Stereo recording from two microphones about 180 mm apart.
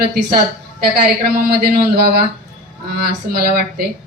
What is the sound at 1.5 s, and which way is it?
Speech, 60° right (ahead or behind).